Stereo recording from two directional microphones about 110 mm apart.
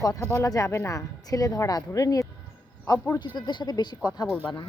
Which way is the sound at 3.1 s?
45° left (ahead or behind).